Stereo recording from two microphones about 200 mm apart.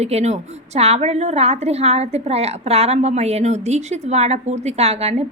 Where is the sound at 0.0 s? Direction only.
35° right (ahead or behind).